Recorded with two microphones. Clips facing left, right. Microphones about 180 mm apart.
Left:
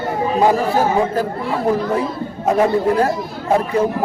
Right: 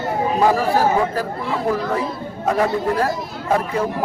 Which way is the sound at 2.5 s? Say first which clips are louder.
Left 4 dB; 20° left (ahead or behind).